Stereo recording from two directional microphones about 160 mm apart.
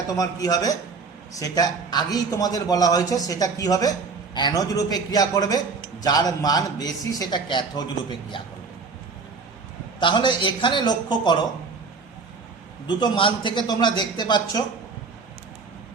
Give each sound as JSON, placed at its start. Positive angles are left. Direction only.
{"t": 0.1, "sound": "a man's voice", "side_deg": 25}
{"t": 10.0, "sound": "a man's voice", "side_deg": 30}
{"t": 12.9, "sound": "a man's voice", "side_deg": 30}